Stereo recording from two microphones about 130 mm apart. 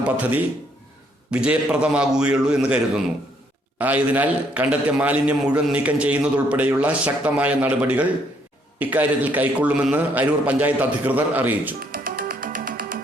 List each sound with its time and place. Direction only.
0.0 s a man's voice: 10° right (ahead or behind)
11.9 s music: 90° right